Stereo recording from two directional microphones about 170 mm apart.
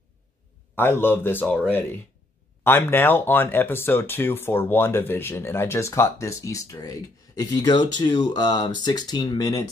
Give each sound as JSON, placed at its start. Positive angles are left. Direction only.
{"t": 0.7, "sound": "speech", "side_deg": 10}